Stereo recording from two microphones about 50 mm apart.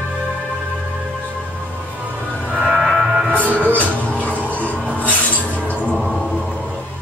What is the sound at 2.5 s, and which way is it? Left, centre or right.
Music, centre.